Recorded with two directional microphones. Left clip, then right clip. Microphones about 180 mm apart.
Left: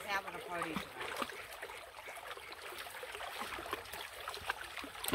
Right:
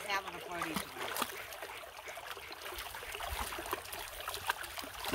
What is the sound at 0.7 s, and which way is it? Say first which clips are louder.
Splash: right 3 dB; 65° right (ahead or behind).